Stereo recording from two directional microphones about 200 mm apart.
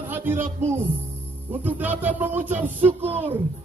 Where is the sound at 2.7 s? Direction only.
30° right (ahead or behind).